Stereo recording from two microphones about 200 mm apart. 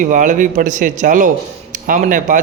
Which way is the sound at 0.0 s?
40° right (ahead or behind).